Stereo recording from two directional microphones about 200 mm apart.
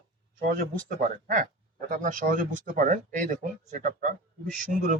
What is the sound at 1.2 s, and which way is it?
A man's voice, 45° right (ahead or behind).